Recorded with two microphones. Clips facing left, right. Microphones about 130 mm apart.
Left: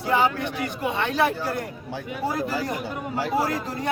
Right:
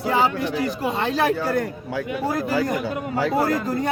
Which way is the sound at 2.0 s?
90° right.